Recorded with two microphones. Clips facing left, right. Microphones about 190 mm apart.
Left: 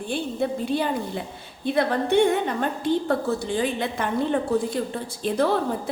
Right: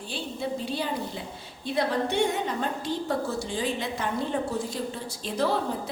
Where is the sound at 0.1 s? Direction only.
55° left (ahead or behind).